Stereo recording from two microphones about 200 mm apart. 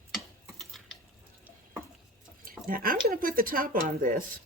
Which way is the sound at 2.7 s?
45° right (ahead or behind).